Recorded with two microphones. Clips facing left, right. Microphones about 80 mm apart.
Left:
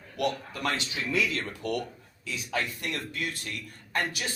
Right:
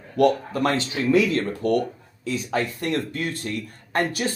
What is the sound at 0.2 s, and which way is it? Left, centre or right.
Speech, right.